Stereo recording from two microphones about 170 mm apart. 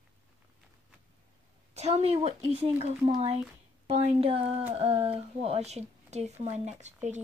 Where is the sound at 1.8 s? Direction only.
40° right (ahead or behind).